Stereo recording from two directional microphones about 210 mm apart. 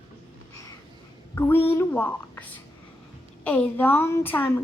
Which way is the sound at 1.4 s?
10° left (ahead or behind).